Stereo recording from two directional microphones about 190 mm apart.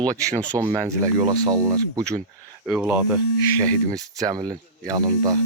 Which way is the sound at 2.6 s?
5° right (ahead or behind).